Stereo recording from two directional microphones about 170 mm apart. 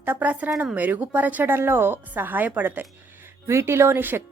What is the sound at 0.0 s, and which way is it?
A woman's voice, 10° right (ahead or behind).